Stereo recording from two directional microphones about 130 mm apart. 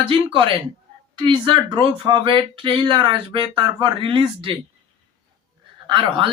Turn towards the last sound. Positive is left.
turn(degrees=-40)  # may be behind; listen again after turning